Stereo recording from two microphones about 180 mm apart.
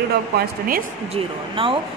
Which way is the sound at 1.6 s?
30° right (ahead or behind).